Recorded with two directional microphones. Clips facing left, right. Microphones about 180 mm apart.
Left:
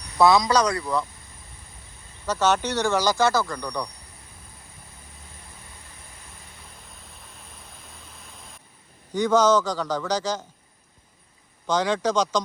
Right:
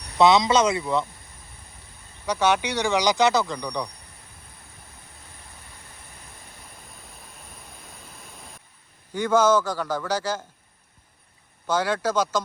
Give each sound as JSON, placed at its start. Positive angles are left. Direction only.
{"t": 0.2, "sound": "speech", "side_deg": -20}
{"t": 2.2, "sound": "speech", "side_deg": -15}
{"t": 9.1, "sound": "speech", "side_deg": -10}
{"t": 11.6, "sound": "speech", "side_deg": -10}